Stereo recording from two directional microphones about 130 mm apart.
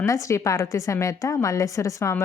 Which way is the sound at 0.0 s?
25° left (ahead or behind).